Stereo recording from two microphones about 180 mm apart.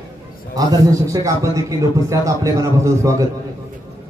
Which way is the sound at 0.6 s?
20° right (ahead or behind).